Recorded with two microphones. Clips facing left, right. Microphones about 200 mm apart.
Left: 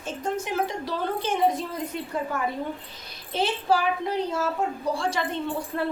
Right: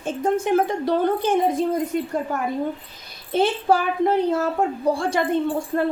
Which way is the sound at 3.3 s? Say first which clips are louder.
Right 5 dB; 55° right (ahead or behind).